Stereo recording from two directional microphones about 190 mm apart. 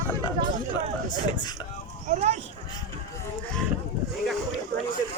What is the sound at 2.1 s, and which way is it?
Speech, 35° right (ahead or behind).